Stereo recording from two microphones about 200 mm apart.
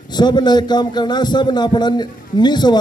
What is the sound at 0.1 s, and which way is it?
A man's voice, 20° left (ahead or behind).